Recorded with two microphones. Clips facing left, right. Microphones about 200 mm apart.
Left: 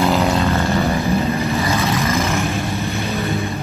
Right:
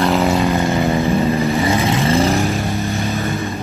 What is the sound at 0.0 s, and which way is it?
Vehicle, centre (ahead or behind).